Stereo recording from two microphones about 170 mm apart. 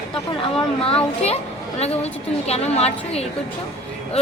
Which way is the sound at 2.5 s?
40° left (ahead or behind).